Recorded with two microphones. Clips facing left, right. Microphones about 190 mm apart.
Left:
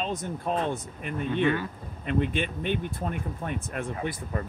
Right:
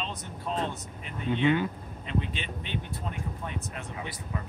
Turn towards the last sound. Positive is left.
turn(degrees=50)  # may be behind; listen again after turning